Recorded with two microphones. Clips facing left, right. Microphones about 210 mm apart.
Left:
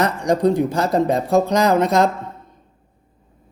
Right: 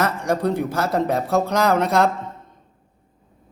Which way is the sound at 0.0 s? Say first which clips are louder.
Left 4 dB; 15° left (ahead or behind).